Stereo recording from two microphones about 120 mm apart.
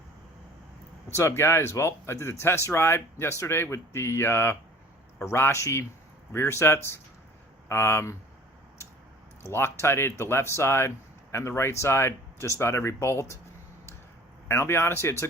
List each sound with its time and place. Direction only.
1.1 s speech: 20° left (ahead or behind)
9.4 s speech: 20° left (ahead or behind)
14.4 s speech: 20° left (ahead or behind)